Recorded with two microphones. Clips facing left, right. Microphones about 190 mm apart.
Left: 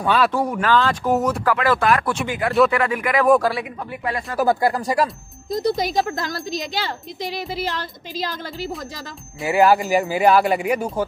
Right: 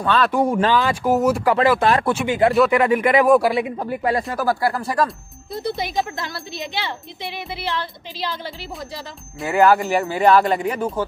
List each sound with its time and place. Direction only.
0.0 s speech: 10° left (ahead or behind)
0.3 s speech: 25° right (ahead or behind)
1.1 s speech: centre (ahead or behind)
1.4 s speech: 20° right (ahead or behind)
3.3 s speech: 15° right (ahead or behind)
3.6 s speech: 35° right (ahead or behind)
4.4 s speech: 20° left (ahead or behind)
5.5 s a woman's voice: 40° left (ahead or behind)
9.5 s speech: 15° left (ahead or behind)